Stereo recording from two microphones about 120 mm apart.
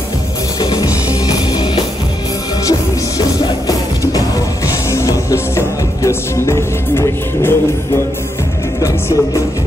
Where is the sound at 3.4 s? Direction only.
30° left (ahead or behind).